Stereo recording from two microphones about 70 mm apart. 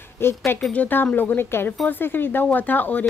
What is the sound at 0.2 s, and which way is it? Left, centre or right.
Speech, left.